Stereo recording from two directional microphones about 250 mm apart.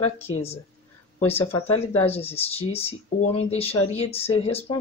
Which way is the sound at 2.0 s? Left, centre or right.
Left.